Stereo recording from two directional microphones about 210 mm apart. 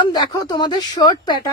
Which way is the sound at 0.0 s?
20° left (ahead or behind).